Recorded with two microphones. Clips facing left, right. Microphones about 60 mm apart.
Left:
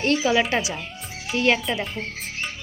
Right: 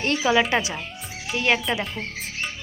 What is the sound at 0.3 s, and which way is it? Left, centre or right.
Speech, centre.